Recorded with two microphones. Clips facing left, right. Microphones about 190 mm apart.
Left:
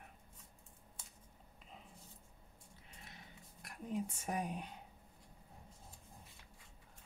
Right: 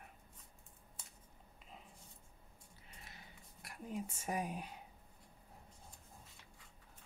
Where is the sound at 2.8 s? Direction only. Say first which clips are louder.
Left 1 dB; centre (ahead or behind).